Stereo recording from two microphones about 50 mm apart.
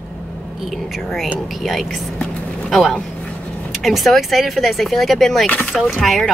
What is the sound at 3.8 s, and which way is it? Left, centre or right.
Speech, centre.